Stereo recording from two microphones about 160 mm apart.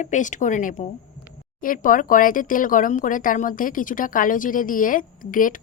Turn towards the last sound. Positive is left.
turn(degrees=55)  # may be behind; listen again after turning